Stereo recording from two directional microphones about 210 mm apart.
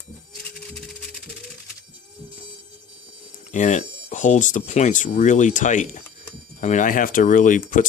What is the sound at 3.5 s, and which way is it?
Speech, 35° left (ahead or behind).